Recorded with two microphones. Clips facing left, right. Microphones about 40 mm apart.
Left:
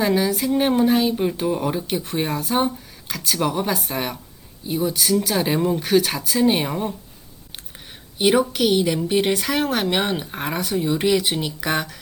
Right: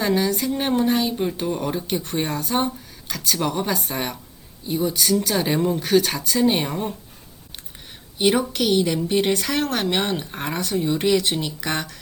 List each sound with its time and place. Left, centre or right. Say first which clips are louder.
0.0 s speech: left 1 dB; centre
8.2 s speech: left 2 dB; centre